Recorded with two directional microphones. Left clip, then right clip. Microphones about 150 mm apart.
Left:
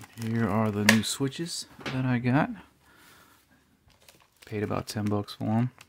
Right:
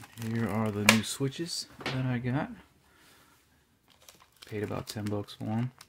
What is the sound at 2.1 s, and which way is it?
Speech, 45° left (ahead or behind).